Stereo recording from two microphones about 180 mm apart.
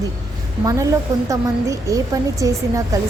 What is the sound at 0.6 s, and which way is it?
A woman's voice, 20° right (ahead or behind).